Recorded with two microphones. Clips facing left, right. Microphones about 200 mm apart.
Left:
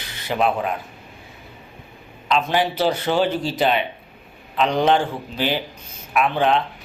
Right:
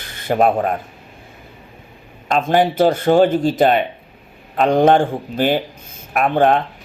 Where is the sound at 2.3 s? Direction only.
50° right (ahead or behind).